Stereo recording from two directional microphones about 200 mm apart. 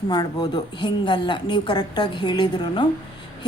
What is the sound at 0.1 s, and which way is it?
A woman's voice, 20° left (ahead or behind).